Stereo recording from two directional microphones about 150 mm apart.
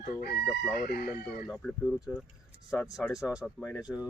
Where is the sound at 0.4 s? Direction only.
Centre (ahead or behind).